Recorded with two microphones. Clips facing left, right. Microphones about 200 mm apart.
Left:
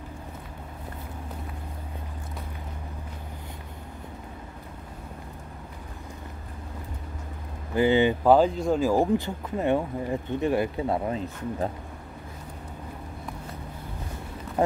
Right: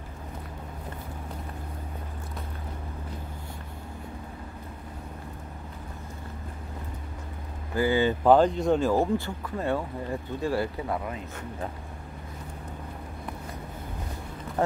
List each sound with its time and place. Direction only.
7.7 s speech: 20° left (ahead or behind)
8.2 s speech: 5° left (ahead or behind); by 11.7 s 30° left (ahead or behind)